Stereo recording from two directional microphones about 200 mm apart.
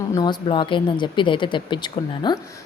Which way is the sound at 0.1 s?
20° left (ahead or behind).